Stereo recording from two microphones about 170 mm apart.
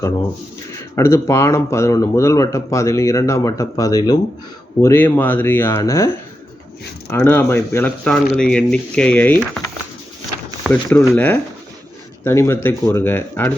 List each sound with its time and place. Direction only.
0.9 s speech: 15° left (ahead or behind)
7.1 s speech: 10° left (ahead or behind)
10.7 s speech: 10° left (ahead or behind)